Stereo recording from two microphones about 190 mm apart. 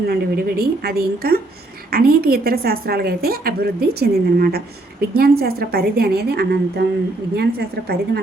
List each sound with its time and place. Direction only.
0.1 s a woman's voice: 55° right (ahead or behind)